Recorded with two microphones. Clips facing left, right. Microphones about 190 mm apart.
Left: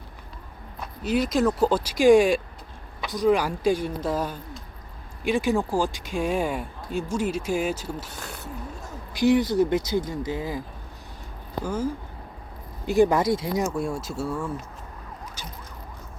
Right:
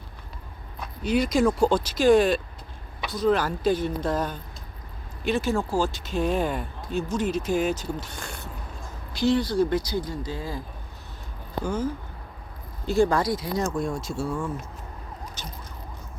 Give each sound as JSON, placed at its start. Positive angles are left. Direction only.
{"t": 1.0, "sound": "speech", "side_deg": 0}
{"t": 11.6, "sound": "speech", "side_deg": 10}
{"t": 13.6, "sound": "speech", "side_deg": 10}
{"t": 15.4, "sound": "emergency vehicle", "side_deg": 10}